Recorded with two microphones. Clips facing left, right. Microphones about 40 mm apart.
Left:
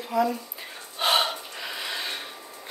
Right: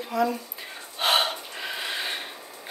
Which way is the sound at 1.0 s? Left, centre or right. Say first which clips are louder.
Even; centre.